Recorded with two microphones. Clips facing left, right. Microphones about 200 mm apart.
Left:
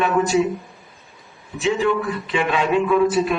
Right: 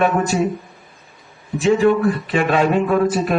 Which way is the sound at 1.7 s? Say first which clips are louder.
Right 5 dB; 50° right (ahead or behind).